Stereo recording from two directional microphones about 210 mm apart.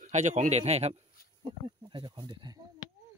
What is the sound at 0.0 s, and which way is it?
A man's voice, 35° right (ahead or behind).